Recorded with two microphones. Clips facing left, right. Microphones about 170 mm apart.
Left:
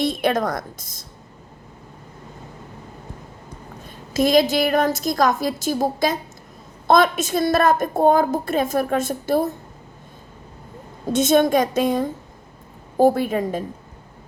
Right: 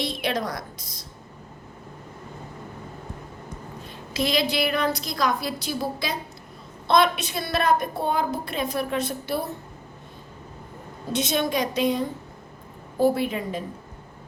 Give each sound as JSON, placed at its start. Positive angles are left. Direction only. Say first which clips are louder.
{"t": 0.0, "sound": "a woman's voice", "louder": "left 7 dB", "side_deg": 50}
{"t": 3.8, "sound": "a woman's voice", "louder": "left 7 dB", "side_deg": 45}
{"t": 11.1, "sound": "a woman's voice", "louder": "left 8 dB", "side_deg": 50}